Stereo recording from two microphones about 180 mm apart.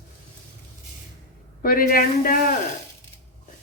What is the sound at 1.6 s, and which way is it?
Speech, 55° left (ahead or behind).